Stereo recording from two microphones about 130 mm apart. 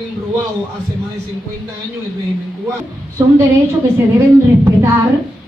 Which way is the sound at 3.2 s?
20° right (ahead or behind).